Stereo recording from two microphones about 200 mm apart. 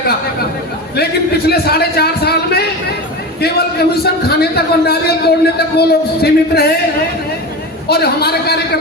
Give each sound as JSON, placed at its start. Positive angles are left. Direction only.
{"t": 0.9, "sound": "a man's voice", "side_deg": 50}
{"t": 7.9, "sound": "a man's voice", "side_deg": 55}